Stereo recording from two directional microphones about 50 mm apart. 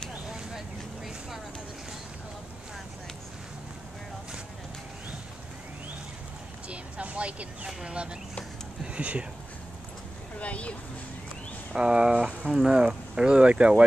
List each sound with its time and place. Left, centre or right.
6.7 s a sound: right
7.6 s speech: centre
10.4 s speech: left
11.7 s speech: centre